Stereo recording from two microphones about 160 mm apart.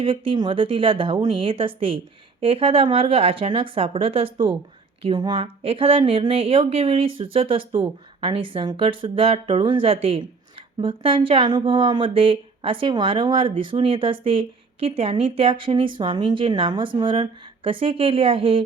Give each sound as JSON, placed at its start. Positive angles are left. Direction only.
{"t": 0.0, "sound": "speech", "side_deg": -35}